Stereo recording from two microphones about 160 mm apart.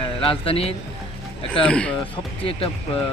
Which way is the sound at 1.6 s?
5° left (ahead or behind).